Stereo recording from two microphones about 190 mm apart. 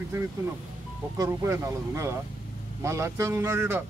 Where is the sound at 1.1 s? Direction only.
15° right (ahead or behind).